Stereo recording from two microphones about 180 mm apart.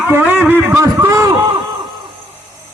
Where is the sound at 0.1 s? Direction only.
10° right (ahead or behind).